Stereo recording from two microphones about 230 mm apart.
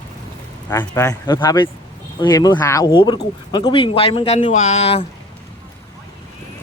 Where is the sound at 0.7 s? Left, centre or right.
Centre.